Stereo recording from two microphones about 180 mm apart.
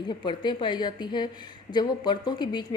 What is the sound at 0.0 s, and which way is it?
Speech, 25° left (ahead or behind).